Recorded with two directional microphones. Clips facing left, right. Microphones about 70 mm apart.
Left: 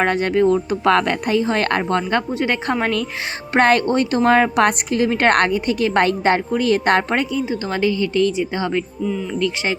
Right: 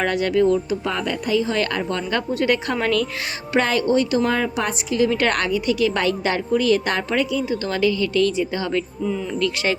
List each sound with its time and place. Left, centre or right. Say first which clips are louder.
0.0 s a woman's voice: left 2 dB; left
0.9 s a woman's voice: left 10 dB; left
1.4 s a woman's voice: left 3 dB; left
3.5 s a woman's voice: left 3 dB; left
4.9 s a woman's voice: left 3 dB; left
7.5 s a woman's voice: even; left